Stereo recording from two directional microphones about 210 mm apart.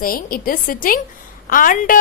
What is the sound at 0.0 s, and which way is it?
A woman's voice, 45° left (ahead or behind).